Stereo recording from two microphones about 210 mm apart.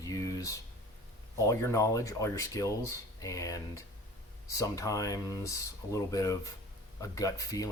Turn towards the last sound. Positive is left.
turn(degrees=15)  # may be behind; listen again after turning